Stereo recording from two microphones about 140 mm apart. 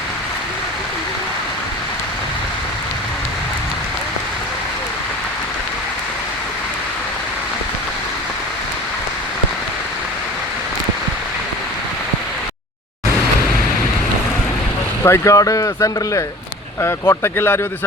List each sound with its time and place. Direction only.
15.0 s speech: 20° left (ahead or behind)